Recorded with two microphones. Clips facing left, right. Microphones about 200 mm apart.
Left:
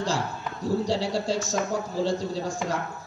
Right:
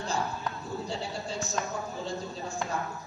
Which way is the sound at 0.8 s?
90° left.